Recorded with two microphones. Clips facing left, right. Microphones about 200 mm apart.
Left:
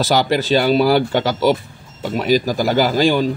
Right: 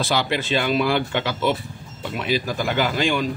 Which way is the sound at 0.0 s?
40° left (ahead or behind).